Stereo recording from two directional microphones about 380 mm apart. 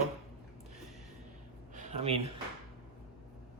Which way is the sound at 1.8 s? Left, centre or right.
Centre.